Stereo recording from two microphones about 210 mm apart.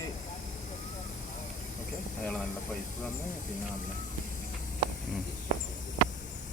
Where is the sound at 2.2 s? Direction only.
5° left (ahead or behind).